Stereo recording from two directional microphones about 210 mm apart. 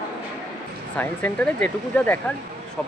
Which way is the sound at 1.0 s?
5° left (ahead or behind).